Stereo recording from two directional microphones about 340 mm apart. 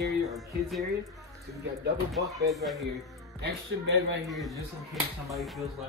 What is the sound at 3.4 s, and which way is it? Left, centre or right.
Speech, right.